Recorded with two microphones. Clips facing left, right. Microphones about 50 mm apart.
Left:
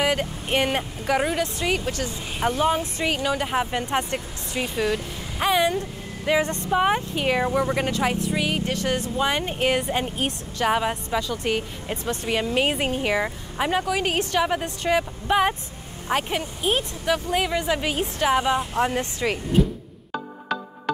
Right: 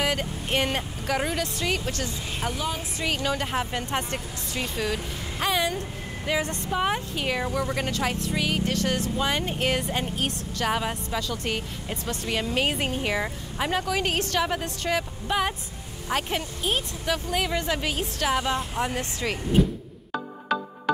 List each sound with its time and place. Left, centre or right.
0.0 s speech: centre; by 2.8 s left
3.1 s speech: centre
8.7 s speech: left
9.1 s speech: centre
11.9 s speech: left
12.3 s speech: centre
20.1 s music: centre